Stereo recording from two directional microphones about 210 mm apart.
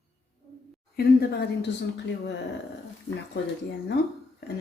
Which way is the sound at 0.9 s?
45° left (ahead or behind).